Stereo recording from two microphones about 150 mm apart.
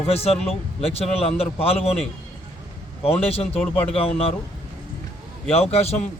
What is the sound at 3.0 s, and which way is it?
Speech, 40° left (ahead or behind).